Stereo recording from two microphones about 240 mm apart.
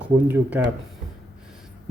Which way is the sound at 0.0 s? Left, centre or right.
Centre.